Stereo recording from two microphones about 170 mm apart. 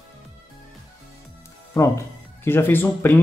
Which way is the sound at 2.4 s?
15° left (ahead or behind).